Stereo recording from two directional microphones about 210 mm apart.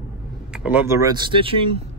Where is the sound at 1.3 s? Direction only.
25° right (ahead or behind).